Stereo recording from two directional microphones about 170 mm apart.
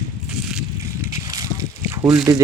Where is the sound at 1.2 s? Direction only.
20° right (ahead or behind).